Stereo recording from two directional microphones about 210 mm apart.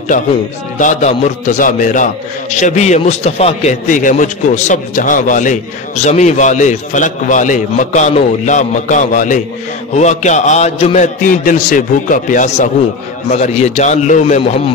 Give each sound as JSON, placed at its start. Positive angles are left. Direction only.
{"t": 0.7, "sound": "a man's voice", "side_deg": 35}